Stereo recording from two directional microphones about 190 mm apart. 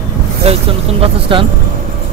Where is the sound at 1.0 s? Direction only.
25° right (ahead or behind).